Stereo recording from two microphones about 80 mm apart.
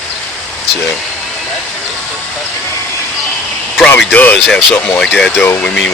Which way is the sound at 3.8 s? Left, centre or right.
Centre.